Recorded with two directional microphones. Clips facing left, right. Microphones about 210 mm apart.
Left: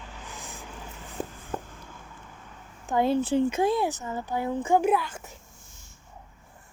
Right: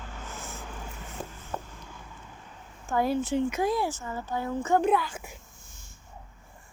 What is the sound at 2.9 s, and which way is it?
Speech, 25° left (ahead or behind).